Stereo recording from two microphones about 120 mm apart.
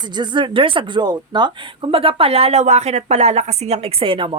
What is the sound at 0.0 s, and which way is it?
Speech, 40° right (ahead or behind).